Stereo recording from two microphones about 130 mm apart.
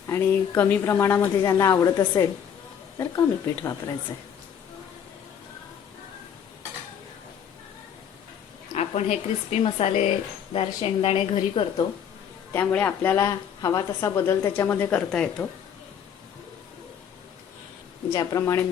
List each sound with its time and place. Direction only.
0.1 s a woman's voice: 15° left (ahead or behind)
8.7 s a woman's voice: 55° left (ahead or behind)
12.5 s a woman's voice: 15° left (ahead or behind)
13.2 s a woman's voice: 30° left (ahead or behind)
14.2 s a woman's voice: 15° left (ahead or behind)
18.1 s a woman's voice: 30° left (ahead or behind)